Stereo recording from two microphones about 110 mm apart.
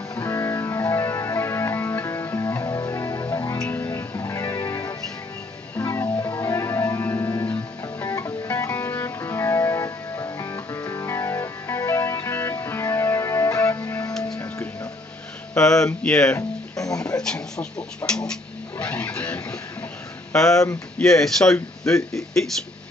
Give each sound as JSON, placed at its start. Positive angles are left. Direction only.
{"t": 0.1, "sound": "music", "side_deg": 30}
{"t": 15.5, "sound": "speech", "side_deg": 5}
{"t": 16.3, "sound": "guitar", "side_deg": 30}
{"t": 17.2, "sound": "speech", "side_deg": 5}
{"t": 21.0, "sound": "speech", "side_deg": 5}